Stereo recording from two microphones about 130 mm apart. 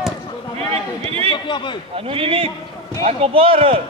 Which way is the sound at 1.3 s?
35° left (ahead or behind).